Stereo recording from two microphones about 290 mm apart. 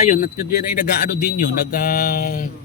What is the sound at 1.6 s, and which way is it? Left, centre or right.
Mantra, left.